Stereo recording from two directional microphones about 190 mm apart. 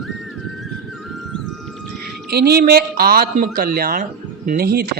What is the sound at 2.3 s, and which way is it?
Speech, 55° right (ahead or behind).